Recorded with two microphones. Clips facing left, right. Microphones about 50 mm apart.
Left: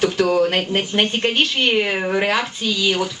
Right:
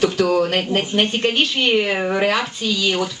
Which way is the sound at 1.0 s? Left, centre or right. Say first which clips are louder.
Even; centre.